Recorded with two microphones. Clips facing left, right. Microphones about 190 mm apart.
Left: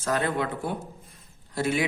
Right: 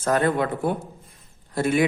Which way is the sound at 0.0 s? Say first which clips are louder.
Right 5 dB; 50° right (ahead or behind).